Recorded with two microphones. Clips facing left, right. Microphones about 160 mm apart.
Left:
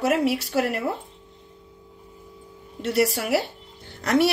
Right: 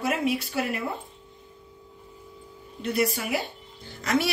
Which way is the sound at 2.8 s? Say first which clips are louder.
Left 4 dB; 80° left.